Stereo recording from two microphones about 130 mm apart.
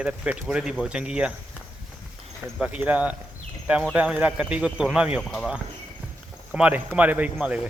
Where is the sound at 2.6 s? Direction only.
10° right (ahead or behind).